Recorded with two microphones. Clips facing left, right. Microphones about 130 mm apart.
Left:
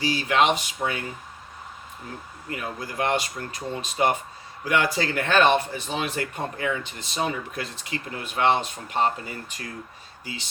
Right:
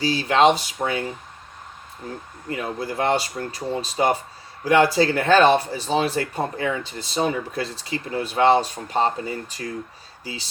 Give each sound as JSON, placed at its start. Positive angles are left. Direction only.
{"t": 0.0, "sound": "speech", "side_deg": -35}
{"t": 2.5, "sound": "speech", "side_deg": -30}